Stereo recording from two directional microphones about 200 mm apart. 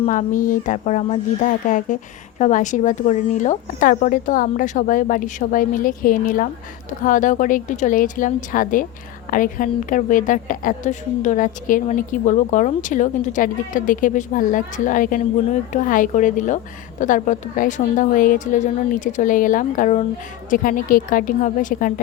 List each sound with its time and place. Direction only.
0.0 s a woman's voice: 35° left (ahead or behind)